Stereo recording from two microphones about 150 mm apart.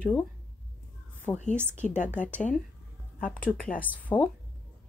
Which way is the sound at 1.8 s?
55° left (ahead or behind).